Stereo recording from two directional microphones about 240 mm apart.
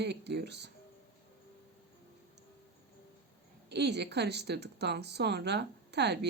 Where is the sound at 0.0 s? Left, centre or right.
Right.